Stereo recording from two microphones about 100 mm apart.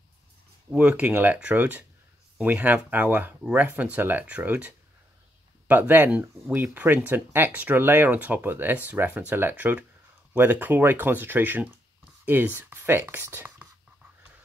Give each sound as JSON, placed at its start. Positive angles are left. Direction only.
{"t": 0.7, "sound": "speech", "side_deg": -15}